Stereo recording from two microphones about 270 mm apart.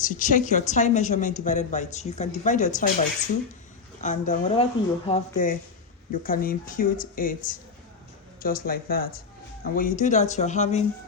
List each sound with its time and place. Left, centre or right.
0.0 s a woman's voice: left
4.0 s a woman's voice: left